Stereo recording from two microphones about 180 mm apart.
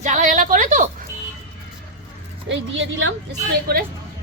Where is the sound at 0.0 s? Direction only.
40° right (ahead or behind).